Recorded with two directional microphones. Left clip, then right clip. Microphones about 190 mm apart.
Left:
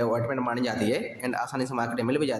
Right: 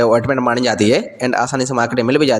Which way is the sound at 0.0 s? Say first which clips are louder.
Right 13 dB; 40° right (ahead or behind).